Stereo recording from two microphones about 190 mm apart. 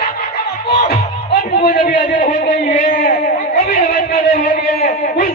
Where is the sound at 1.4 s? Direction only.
35° left (ahead or behind).